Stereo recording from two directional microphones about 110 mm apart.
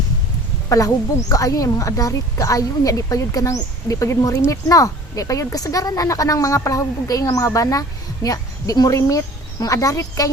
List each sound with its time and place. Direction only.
1.3 s a woman's voice: 30° left (ahead or behind)